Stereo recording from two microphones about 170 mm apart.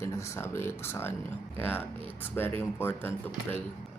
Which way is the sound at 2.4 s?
10° left (ahead or behind).